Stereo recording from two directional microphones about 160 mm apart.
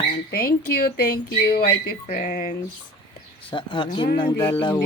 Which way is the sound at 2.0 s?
55° left (ahead or behind).